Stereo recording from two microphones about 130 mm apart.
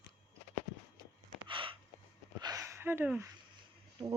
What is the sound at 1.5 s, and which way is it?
Gasp, 40° right (ahead or behind).